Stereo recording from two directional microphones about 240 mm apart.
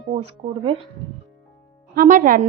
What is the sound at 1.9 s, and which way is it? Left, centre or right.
Speech, right.